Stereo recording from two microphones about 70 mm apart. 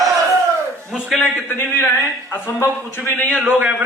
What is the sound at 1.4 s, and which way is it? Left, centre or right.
Speech, left.